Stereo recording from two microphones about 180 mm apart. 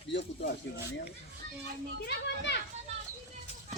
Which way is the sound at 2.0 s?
70° left (ahead or behind).